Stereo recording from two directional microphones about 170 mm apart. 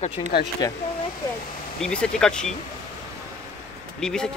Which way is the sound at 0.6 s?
20° left (ahead or behind).